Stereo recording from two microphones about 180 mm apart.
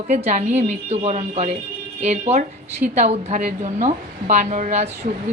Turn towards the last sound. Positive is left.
turn(degrees=-40)  # may be behind; listen again after turning